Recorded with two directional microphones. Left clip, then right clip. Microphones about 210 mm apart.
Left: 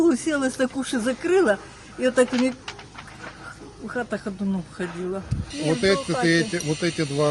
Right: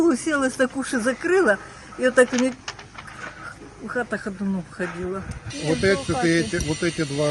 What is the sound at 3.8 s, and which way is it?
Speech, 5° left (ahead or behind).